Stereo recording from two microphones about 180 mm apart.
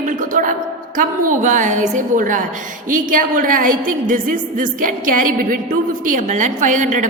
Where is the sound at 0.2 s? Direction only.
50° right (ahead or behind).